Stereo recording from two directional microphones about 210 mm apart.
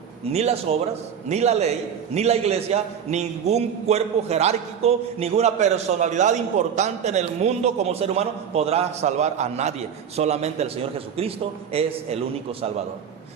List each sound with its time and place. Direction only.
0.3 s a man's voice: 30° right (ahead or behind)